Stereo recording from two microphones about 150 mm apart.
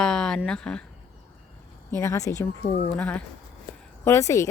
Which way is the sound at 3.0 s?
10° left (ahead or behind).